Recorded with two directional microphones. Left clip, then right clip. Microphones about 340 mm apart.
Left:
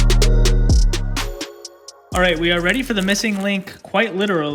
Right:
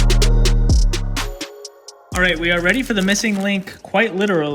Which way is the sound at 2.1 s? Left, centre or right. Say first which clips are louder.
Even; centre.